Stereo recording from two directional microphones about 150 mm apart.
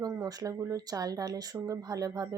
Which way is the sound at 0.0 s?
25° right (ahead or behind).